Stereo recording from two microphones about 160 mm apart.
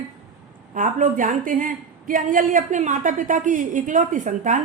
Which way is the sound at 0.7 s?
55° right (ahead or behind).